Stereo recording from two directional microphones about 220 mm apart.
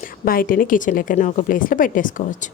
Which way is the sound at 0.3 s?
40° left (ahead or behind).